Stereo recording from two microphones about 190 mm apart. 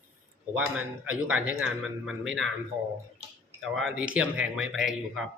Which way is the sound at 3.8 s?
5° right (ahead or behind).